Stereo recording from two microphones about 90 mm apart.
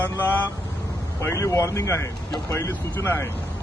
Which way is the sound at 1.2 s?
30° left (ahead or behind).